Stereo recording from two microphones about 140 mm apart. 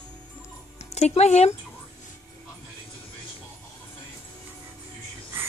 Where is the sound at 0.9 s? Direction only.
50° left (ahead or behind).